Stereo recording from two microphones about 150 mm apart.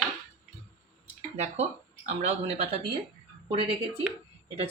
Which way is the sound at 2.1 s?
45° right (ahead or behind).